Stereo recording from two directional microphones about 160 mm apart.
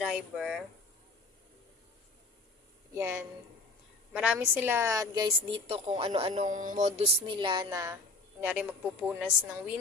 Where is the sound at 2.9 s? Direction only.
15° right (ahead or behind).